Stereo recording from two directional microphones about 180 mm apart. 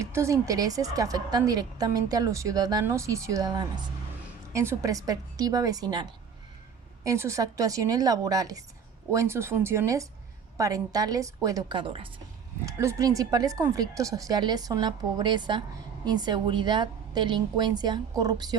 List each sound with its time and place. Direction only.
0.0 s a woman's voice: 15° right (ahead or behind)
12.6 s a woman's voice: 15° right (ahead or behind)